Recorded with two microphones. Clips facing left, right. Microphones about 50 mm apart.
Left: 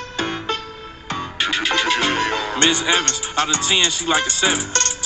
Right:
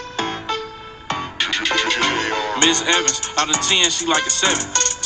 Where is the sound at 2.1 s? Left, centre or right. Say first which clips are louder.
Even; left.